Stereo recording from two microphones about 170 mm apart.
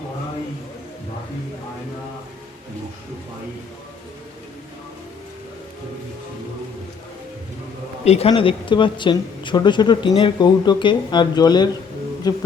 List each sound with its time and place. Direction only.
8.0 s a man's voice: 40° left (ahead or behind); by 12.4 s 25° left (ahead or behind)